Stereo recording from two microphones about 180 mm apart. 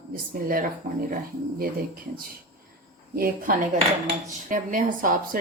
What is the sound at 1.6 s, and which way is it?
A woman's voice, 55° right (ahead or behind).